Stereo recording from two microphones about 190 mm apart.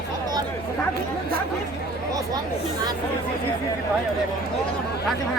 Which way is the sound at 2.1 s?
20° right (ahead or behind).